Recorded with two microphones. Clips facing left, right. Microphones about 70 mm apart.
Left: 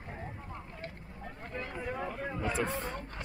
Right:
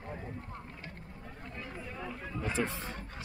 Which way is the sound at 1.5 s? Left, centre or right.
Left.